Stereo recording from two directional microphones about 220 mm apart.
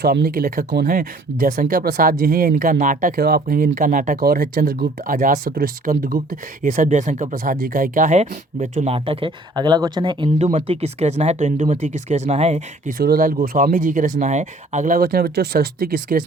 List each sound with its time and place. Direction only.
0.0 s speech: 45° right (ahead or behind); by 12.6 s 30° right (ahead or behind)
13.0 s speech: 40° right (ahead or behind)